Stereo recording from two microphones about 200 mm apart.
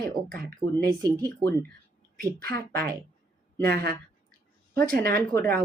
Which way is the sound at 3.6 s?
50° right (ahead or behind).